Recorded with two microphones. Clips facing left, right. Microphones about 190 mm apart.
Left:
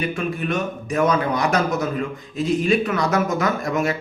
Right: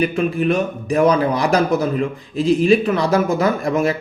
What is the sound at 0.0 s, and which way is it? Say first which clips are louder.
Speech: right 7 dB; 35° right (ahead or behind).